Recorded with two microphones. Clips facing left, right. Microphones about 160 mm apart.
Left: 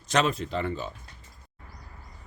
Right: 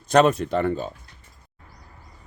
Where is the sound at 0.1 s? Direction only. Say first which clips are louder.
Right 8 dB; 55° right (ahead or behind).